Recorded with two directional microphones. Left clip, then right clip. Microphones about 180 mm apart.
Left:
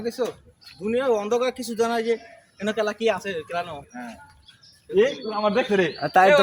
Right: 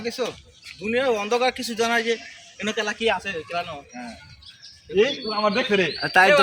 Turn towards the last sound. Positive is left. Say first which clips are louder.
# even
turn(degrees=50)  # may be behind; listen again after turning